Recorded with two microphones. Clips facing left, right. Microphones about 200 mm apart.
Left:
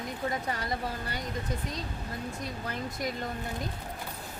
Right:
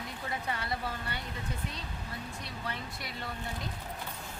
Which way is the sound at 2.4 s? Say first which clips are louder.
Left 4 dB; 45° left (ahead or behind).